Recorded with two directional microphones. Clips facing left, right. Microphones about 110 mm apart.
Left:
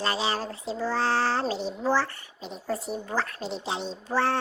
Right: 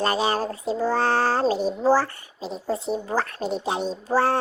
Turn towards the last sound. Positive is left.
turn(degrees=-40)  # may be behind; listen again after turning